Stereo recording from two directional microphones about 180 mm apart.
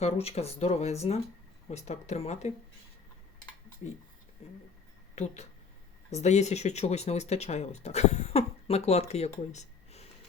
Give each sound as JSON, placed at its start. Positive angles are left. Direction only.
{"t": 0.0, "sound": "speech", "side_deg": 35}
{"t": 5.1, "sound": "speech", "side_deg": 40}
{"t": 9.5, "sound": "a sound", "side_deg": 35}